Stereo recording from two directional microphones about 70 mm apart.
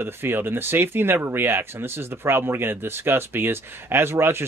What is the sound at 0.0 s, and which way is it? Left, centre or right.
Speech, right.